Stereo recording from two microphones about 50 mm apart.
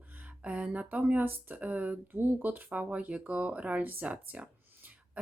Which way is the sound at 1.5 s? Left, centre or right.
Right.